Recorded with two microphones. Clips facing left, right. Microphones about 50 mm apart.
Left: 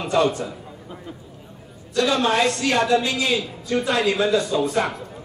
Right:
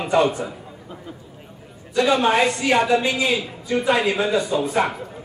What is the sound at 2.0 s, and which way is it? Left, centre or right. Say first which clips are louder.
A woman's voice: right 2 dB; centre.